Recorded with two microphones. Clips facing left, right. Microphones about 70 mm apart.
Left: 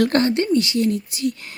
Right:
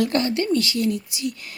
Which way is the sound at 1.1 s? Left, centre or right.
Left.